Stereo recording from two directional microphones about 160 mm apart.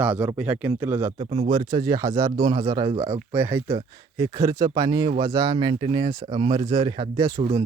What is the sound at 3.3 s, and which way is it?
Speech, 15° right (ahead or behind).